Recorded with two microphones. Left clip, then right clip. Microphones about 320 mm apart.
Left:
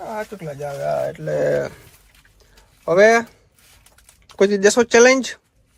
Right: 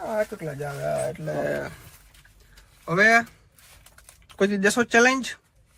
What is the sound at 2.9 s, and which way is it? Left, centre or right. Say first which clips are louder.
Speech: left 5 dB; centre.